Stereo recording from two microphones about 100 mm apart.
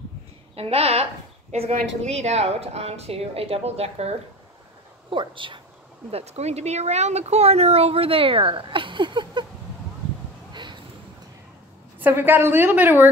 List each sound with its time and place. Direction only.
0.6 s speech: 85° right
5.1 s a woman's voice: 55° right (ahead or behind)
6.1 s speech: 90° right; by 9.5 s 50° right (ahead or behind)
10.5 s a sound: 50° right (ahead or behind)
12.0 s a woman's voice: 20° right (ahead or behind)